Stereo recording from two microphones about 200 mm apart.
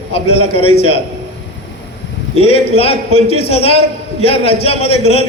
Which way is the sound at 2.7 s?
30° left (ahead or behind).